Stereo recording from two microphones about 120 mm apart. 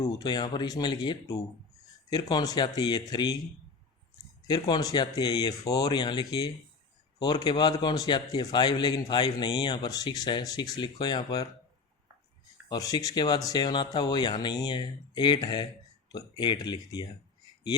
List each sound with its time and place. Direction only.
0.0 s a man's voice: 35° left (ahead or behind)
4.4 s a man's voice: 35° left (ahead or behind)
12.6 s a man's voice: 35° left (ahead or behind)